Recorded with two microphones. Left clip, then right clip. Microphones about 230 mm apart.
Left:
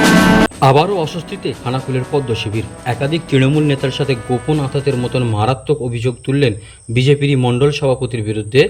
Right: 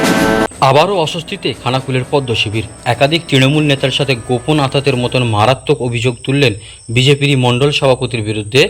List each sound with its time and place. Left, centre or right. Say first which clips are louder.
0.4 s a man's voice: right 2 dB; centre